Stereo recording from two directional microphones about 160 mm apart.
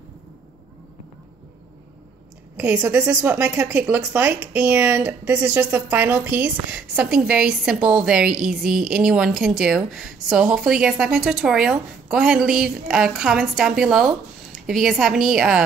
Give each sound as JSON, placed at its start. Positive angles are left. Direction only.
{"t": 2.5, "sound": "a woman's voice", "side_deg": -5}